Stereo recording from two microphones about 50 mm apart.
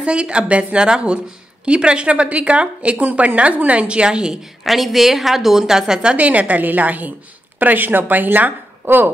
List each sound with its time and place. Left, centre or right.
0.0 s speech: right
4.6 s a woman's voice: centre
6.1 s a woman's voice: right